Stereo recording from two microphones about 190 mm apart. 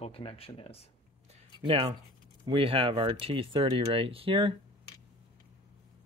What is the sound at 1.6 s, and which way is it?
Speech, 25° right (ahead or behind).